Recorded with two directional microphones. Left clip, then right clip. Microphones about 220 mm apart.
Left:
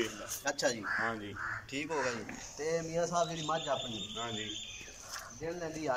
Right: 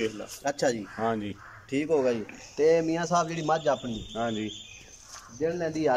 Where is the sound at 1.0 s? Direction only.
50° right (ahead or behind).